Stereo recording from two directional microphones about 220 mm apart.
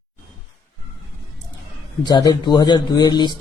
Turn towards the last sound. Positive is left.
turn(degrees=20)  # may be behind; listen again after turning